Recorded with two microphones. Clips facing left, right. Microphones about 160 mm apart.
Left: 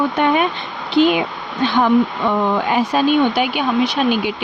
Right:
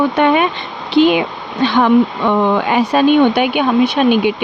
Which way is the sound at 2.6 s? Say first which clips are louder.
Right 4 dB; 75° right (ahead or behind).